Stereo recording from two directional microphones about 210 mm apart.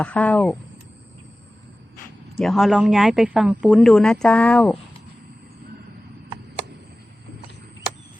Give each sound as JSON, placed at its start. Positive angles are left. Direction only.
{"t": 0.0, "sound": "speech", "side_deg": 5}
{"t": 2.4, "sound": "speech", "side_deg": 0}